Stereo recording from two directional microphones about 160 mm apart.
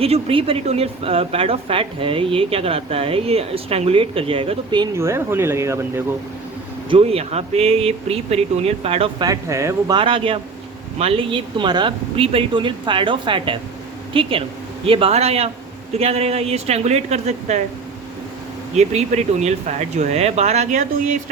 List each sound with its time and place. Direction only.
0.0 s a woman's voice: 35° right (ahead or behind)
4.9 s speech: 15° right (ahead or behind)
6.9 s a woman's voice: 40° right (ahead or behind)
9.2 s a woman's voice: 20° right (ahead or behind); by 17.6 s 45° right (ahead or behind)
18.8 s speech: 45° right (ahead or behind)